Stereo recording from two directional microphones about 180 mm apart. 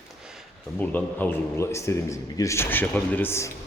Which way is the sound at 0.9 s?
10° left (ahead or behind).